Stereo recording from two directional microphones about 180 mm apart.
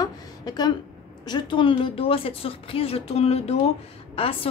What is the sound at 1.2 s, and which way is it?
A woman's voice, 25° left (ahead or behind).